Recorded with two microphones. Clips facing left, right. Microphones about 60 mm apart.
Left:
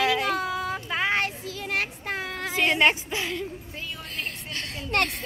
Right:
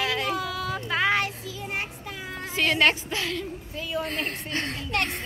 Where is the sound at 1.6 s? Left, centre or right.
Left.